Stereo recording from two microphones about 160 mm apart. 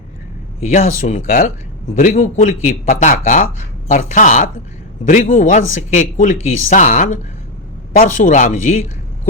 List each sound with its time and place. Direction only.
0.6 s speech: 45° left (ahead or behind)